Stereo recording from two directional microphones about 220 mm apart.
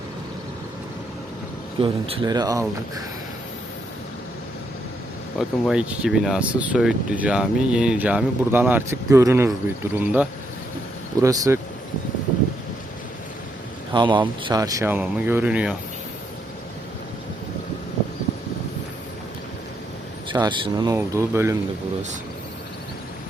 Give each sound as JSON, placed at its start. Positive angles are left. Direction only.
{"t": 1.8, "sound": "speech", "side_deg": -25}
{"t": 5.4, "sound": "speech", "side_deg": -5}
{"t": 13.9, "sound": "speech", "side_deg": -20}
{"t": 20.3, "sound": "speech", "side_deg": -20}